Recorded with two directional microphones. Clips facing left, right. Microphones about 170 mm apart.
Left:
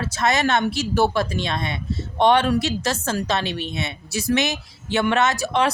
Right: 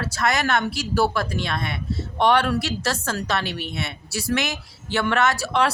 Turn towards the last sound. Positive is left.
turn(degrees=20)  # may be behind; listen again after turning